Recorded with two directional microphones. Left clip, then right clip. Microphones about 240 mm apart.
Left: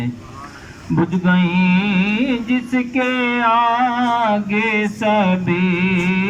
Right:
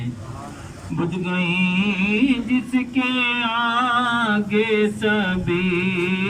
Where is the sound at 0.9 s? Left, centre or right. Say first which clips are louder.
Left 6 dB; left.